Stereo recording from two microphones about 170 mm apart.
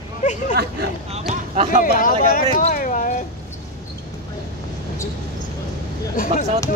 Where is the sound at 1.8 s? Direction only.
55° left (ahead or behind).